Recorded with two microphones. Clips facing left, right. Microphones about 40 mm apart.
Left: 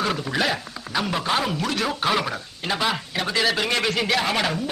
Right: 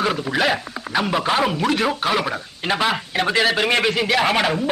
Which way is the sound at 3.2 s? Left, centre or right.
Right.